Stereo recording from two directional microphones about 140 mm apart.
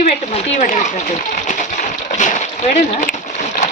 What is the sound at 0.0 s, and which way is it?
Speech, 60° left (ahead or behind).